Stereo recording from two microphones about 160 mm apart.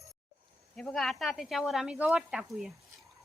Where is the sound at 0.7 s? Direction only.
Centre (ahead or behind).